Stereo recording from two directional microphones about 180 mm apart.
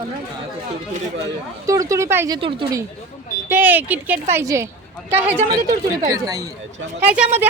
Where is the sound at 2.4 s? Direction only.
25° right (ahead or behind).